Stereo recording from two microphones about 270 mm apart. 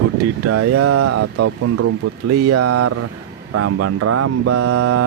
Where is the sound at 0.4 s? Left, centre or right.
Right.